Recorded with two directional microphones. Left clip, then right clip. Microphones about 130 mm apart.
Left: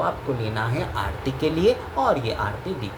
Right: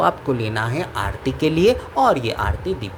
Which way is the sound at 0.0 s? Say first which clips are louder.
Right 6 dB; 60° right (ahead or behind).